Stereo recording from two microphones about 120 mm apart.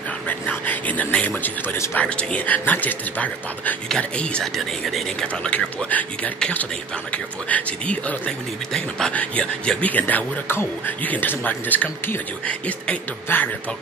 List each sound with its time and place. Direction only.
0.3 s speech: 15° left (ahead or behind)